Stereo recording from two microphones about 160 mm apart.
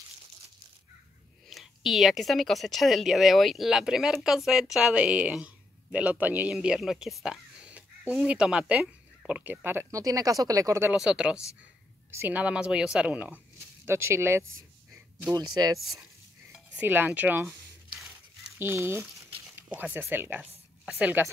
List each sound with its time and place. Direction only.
1.5 s speech: centre (ahead or behind); by 11.0 s 15° right (ahead or behind)
11.0 s a woman's voice: 5° right (ahead or behind); by 15.8 s 25° right (ahead or behind)
15.8 s speech: centre (ahead or behind)
18.6 s a woman's voice: 15° right (ahead or behind)